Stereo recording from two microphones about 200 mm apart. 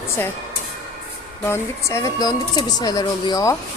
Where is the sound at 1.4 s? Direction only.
15° left (ahead or behind).